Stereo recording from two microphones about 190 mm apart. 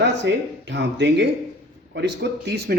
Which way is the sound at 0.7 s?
65° right (ahead or behind).